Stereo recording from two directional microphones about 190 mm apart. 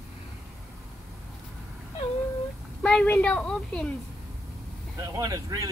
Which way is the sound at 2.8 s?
5° left (ahead or behind).